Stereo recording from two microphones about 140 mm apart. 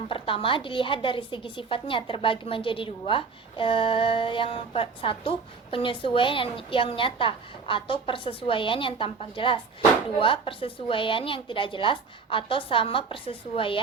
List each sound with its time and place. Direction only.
0.1 s a woman's voice: 40° left (ahead or behind)